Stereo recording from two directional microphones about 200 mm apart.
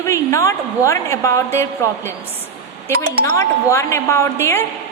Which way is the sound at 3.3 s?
15° left (ahead or behind).